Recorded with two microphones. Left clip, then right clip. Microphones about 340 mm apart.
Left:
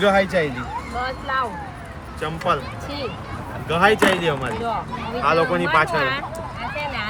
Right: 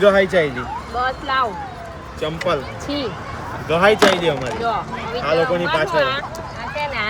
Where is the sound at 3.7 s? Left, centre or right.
Centre.